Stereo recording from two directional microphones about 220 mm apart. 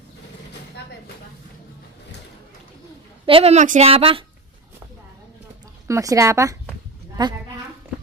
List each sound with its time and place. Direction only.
3.2 s a woman's voice: 25° right (ahead or behind)
5.9 s a woman's voice: 15° right (ahead or behind)